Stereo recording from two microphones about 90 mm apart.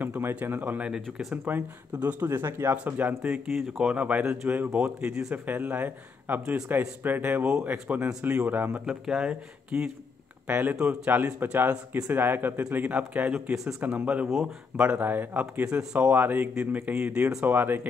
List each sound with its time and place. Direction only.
0.1 s a man's voice: 25° right (ahead or behind)
8.7 s a man's voice: 10° right (ahead or behind)